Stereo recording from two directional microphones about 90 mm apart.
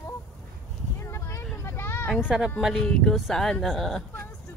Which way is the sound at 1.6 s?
25° left (ahead or behind).